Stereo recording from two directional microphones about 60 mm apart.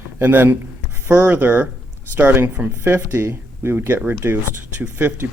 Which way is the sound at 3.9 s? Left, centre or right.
Right.